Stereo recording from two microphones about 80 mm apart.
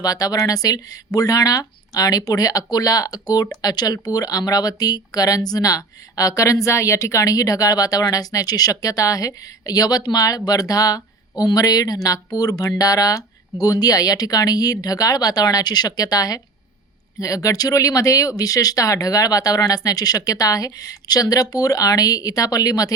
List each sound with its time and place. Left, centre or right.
0.0 s speech: left